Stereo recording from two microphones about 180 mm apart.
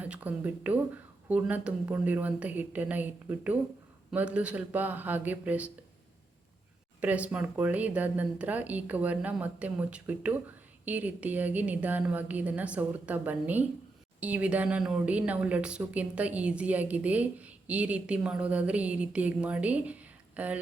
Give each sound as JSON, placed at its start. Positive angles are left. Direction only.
{"t": 0.0, "sound": "speech", "side_deg": -10}
{"t": 7.0, "sound": "speech", "side_deg": -10}